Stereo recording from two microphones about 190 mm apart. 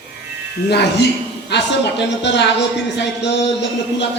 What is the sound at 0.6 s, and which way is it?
Speech, 60° left (ahead or behind).